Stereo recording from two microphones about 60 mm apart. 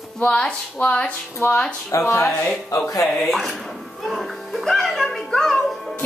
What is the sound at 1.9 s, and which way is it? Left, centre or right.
Speech, left.